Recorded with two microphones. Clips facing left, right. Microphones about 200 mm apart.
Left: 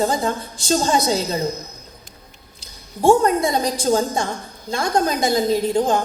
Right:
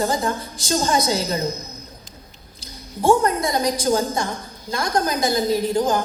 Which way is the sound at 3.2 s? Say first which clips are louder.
Left 2 dB; 30° left (ahead or behind).